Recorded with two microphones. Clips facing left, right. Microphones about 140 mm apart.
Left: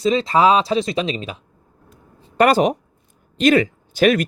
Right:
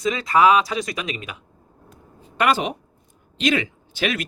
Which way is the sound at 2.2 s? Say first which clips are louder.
Left 6 dB; 40° left (ahead or behind).